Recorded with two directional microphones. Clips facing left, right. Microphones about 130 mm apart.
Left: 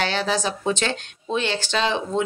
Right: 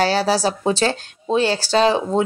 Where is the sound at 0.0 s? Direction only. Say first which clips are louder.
Right 6 dB; 35° right (ahead or behind).